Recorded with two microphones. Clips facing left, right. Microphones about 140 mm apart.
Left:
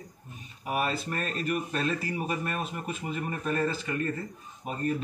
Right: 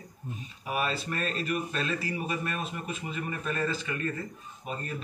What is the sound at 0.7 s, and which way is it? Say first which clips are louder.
Speech: left 1 dB; 50° left (ahead or behind).